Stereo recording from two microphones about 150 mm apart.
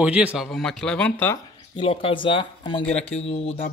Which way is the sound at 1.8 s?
40° left (ahead or behind).